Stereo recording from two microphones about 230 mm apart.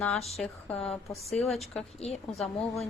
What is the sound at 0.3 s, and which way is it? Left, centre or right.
Speech, centre.